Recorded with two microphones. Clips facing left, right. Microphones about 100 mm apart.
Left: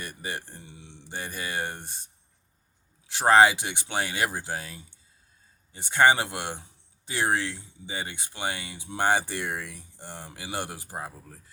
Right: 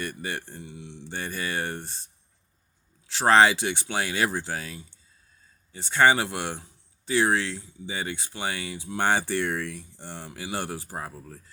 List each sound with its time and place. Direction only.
0.0 s speech: 15° left (ahead or behind)
3.1 s speech: 15° left (ahead or behind)